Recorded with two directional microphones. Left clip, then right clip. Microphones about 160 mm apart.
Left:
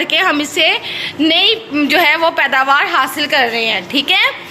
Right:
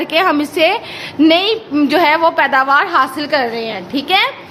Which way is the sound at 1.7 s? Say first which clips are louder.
Even; 30° right (ahead or behind).